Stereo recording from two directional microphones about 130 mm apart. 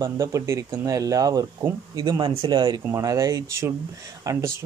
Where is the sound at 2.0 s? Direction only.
40° right (ahead or behind).